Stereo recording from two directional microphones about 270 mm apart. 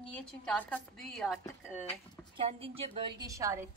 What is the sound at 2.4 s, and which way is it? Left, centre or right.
A woman's voice, right.